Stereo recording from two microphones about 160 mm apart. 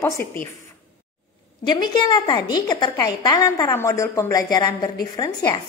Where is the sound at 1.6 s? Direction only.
25° left (ahead or behind).